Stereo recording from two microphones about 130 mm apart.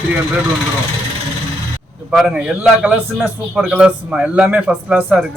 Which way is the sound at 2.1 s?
5° right (ahead or behind).